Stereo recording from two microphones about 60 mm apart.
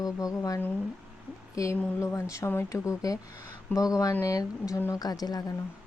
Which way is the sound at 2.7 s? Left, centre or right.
Left.